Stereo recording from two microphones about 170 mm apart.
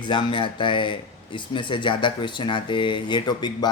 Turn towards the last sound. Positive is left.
turn(degrees=25)  # may be behind; listen again after turning